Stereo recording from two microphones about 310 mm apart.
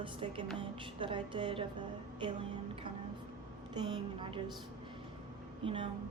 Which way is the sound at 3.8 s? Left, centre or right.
Centre.